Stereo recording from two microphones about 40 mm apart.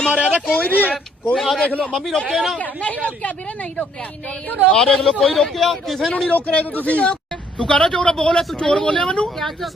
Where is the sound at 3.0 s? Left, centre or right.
Left.